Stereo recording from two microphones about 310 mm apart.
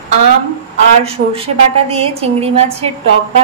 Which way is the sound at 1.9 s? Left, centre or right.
Centre.